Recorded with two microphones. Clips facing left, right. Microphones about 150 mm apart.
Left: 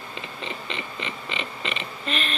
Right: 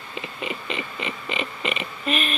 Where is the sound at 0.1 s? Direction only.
10° right (ahead or behind).